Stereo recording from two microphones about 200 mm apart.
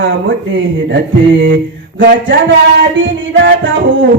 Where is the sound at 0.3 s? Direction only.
65° right (ahead or behind).